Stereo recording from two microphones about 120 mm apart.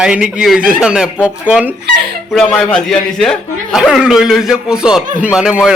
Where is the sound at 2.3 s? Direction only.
5° left (ahead or behind).